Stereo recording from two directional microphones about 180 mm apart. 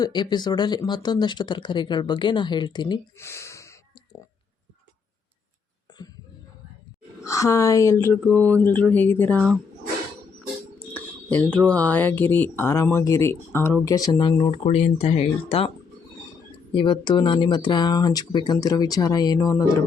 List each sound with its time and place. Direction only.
0.0 s speech: 25° left (ahead or behind)
5.9 s a sound: 20° left (ahead or behind)
7.3 s speech: 15° left (ahead or behind)
10.9 s speech: 10° left (ahead or behind); by 14.5 s 25° left (ahead or behind)
14.5 s speech: 35° left (ahead or behind)
16.7 s speech: 25° left (ahead or behind)